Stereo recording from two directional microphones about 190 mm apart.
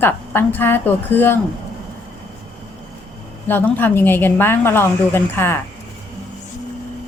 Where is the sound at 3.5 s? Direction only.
10° left (ahead or behind).